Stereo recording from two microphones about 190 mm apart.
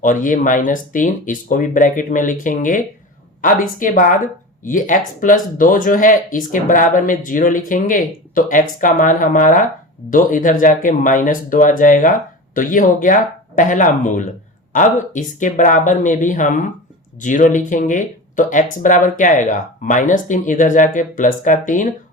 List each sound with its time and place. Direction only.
0.0 s speech: 45° left (ahead or behind)